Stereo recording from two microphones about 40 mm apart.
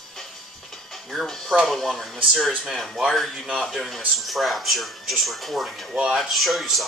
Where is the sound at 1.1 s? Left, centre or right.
Centre.